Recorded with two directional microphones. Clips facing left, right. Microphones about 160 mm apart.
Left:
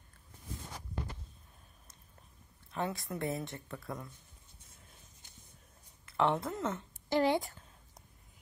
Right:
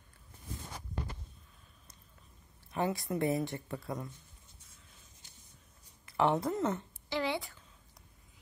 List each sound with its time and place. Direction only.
2.7 s speech: 5° right (ahead or behind)
3.8 s speech: 15° right (ahead or behind)
6.1 s speech: 5° right (ahead or behind)
7.1 s a woman's voice: 45° left (ahead or behind)